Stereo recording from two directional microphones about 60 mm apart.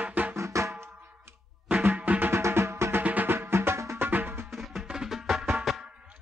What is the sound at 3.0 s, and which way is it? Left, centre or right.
Music, right.